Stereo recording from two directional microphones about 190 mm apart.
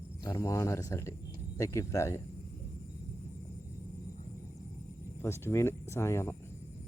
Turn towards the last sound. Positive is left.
turn(degrees=15)  # may be behind; listen again after turning